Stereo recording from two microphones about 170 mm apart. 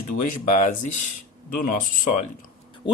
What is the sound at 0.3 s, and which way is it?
Speech, 50° left (ahead or behind).